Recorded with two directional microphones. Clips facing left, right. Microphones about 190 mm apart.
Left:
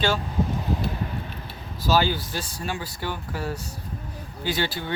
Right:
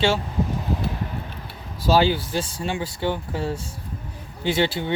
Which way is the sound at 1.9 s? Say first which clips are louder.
Right 4 dB; 30° right (ahead or behind).